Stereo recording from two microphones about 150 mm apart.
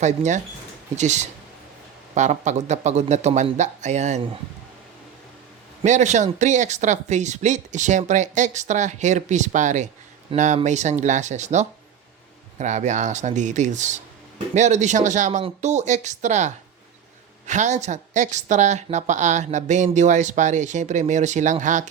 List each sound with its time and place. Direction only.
0.0 s a woman's voice: 50° right (ahead or behind)
5.8 s a woman's voice: 50° right (ahead or behind)